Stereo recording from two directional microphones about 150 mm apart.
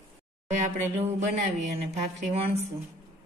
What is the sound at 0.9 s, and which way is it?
Speech, 50° right (ahead or behind).